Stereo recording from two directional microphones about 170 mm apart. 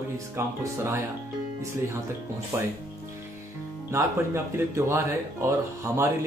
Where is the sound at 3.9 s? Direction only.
15° right (ahead or behind).